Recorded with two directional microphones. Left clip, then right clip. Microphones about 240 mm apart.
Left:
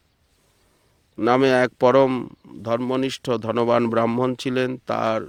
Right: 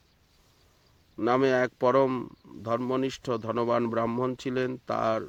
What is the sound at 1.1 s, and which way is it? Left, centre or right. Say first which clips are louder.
Speech: left 7 dB; left.